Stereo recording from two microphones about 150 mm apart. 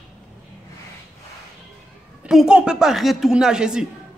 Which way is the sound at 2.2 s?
5° right (ahead or behind).